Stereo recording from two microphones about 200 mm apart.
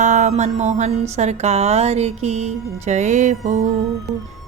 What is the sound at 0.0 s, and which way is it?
A woman's voice, 35° right (ahead or behind).